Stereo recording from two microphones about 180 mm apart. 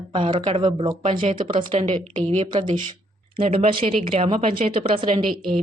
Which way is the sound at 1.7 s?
40° right (ahead or behind).